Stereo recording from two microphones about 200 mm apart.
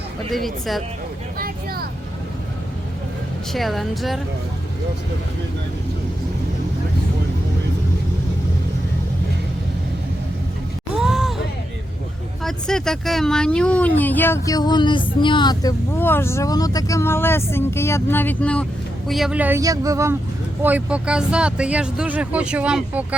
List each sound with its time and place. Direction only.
0.3 s speech: centre (ahead or behind)
1.4 s speech: 50° right (ahead or behind)
3.5 s speech: centre (ahead or behind)
10.9 s a sound: centre (ahead or behind)
12.4 s speech: centre (ahead or behind)